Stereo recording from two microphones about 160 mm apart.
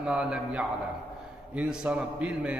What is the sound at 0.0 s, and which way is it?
A man's voice, 5° right (ahead or behind).